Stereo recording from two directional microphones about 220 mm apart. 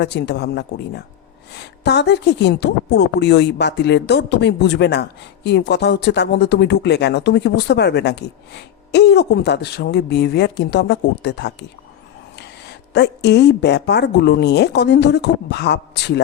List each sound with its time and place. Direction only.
0.0 s a woman's voice: 50° left (ahead or behind)
12.9 s a woman's voice: 50° left (ahead or behind)